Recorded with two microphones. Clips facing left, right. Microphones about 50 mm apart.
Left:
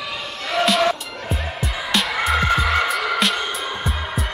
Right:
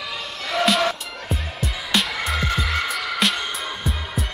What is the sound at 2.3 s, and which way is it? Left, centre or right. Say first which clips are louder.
Music: left 6 dB; centre.